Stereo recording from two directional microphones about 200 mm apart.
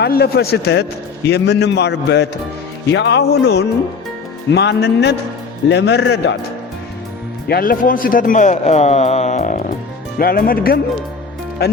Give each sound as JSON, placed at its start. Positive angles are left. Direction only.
{"t": 0.0, "sound": "a man's voice", "side_deg": 55}
{"t": 7.4, "sound": "a man's voice", "side_deg": 50}
{"t": 10.2, "sound": "speech", "side_deg": 50}